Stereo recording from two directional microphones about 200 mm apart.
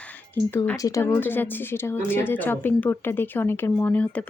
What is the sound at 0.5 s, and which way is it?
Speech, 10° left (ahead or behind).